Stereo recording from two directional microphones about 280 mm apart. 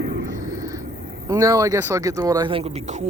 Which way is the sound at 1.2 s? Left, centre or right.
Centre.